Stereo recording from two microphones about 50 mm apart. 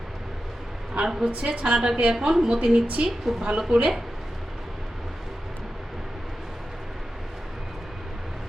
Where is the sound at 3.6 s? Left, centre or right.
Centre.